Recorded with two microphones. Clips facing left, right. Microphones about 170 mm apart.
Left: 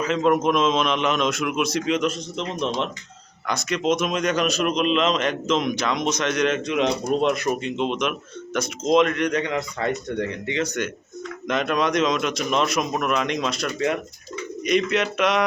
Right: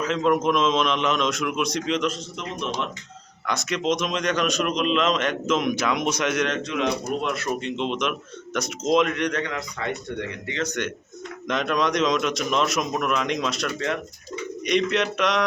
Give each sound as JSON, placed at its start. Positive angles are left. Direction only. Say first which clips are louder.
{"t": 0.0, "sound": "speech", "louder": "left 2 dB", "side_deg": 5}
{"t": 3.4, "sound": "speech", "louder": "left 2 dB", "side_deg": 0}
{"t": 6.5, "sound": "a man's voice", "louder": "left 3 dB", "side_deg": 15}
{"t": 7.9, "sound": "speech", "louder": "left 1 dB", "side_deg": 0}
{"t": 9.3, "sound": "speech", "louder": "left 4 dB", "side_deg": 20}
{"t": 9.7, "sound": "speech", "louder": "left 4 dB", "side_deg": 40}
{"t": 10.4, "sound": "a man's voice", "louder": "left 2 dB", "side_deg": 15}
{"t": 13.7, "sound": "a man's voice", "louder": "left 4 dB", "side_deg": 10}